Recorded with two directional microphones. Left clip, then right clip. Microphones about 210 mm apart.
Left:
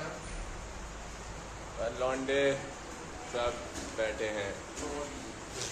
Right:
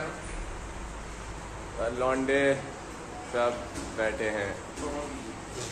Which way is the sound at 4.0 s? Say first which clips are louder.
Right 4 dB; 25° right (ahead or behind).